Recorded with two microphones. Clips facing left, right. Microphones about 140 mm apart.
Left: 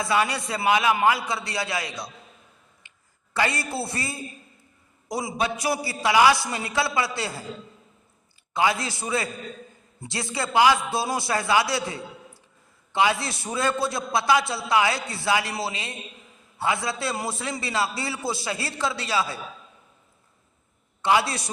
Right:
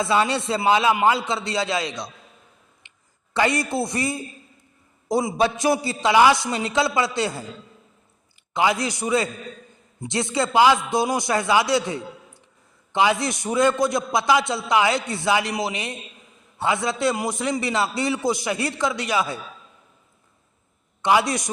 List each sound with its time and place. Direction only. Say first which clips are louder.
0.0 s a man's voice: right 3 dB; 25° right (ahead or behind)
2.8 s a sound: even; 20° right (ahead or behind)
3.3 s a man's voice: right 5 dB; 20° right (ahead or behind)
8.5 s a man's voice: right 2 dB; 20° right (ahead or behind)
21.0 s a man's voice: right 2 dB; 20° right (ahead or behind)